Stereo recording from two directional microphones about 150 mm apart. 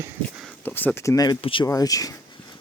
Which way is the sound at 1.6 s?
25° left (ahead or behind).